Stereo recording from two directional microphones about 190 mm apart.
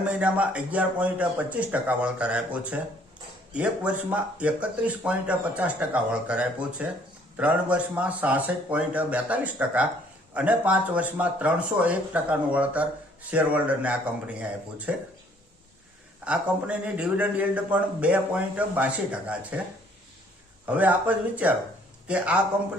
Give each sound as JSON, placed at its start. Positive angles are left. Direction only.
{"t": 0.1, "sound": "a man's voice", "side_deg": -5}
{"t": 16.2, "sound": "a man's voice", "side_deg": -5}
{"t": 20.7, "sound": "a man's voice", "side_deg": -10}